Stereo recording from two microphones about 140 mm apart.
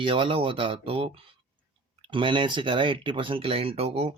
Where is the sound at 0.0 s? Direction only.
35° right (ahead or behind).